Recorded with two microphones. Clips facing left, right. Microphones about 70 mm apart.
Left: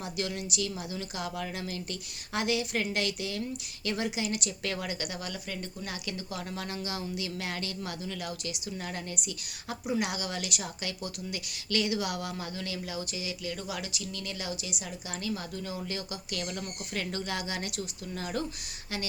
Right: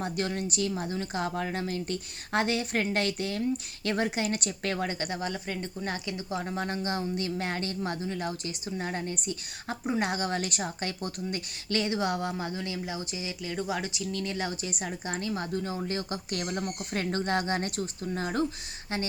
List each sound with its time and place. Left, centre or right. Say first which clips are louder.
0.0 s a woman's voice: right 4 dB; right